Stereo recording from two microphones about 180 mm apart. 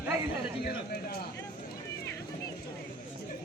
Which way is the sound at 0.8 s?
60° left (ahead or behind).